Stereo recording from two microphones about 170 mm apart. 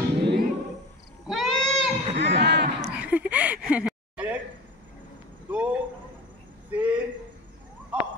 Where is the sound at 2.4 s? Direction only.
80° right.